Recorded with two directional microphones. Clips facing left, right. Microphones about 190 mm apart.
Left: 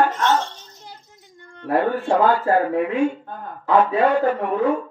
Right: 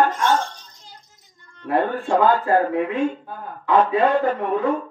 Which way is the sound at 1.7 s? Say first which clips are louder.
Left 1 dB; 10° left (ahead or behind).